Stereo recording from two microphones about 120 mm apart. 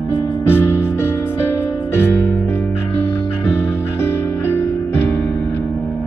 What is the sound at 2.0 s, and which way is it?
Music, 20° left (ahead or behind).